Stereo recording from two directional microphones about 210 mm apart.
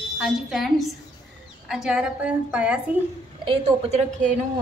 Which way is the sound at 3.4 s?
30° right (ahead or behind).